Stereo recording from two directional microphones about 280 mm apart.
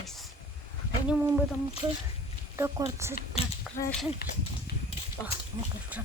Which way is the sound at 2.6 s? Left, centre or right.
Centre.